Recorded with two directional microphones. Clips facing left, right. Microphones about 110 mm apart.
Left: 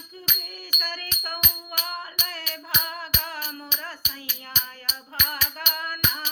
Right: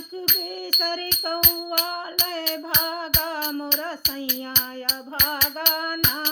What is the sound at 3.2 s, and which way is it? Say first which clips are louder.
Music: right 8 dB; 25° right (ahead or behind).